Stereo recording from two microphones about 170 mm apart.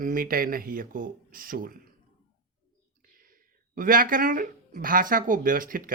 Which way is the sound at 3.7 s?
55° right (ahead or behind).